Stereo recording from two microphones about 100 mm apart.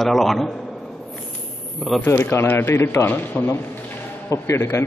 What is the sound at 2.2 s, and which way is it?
A man's voice, 25° left (ahead or behind).